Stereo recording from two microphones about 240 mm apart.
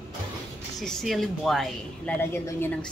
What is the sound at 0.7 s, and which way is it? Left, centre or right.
Speech, centre.